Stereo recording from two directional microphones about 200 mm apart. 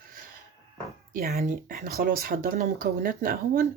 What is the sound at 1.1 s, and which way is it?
Speech, 50° right (ahead or behind).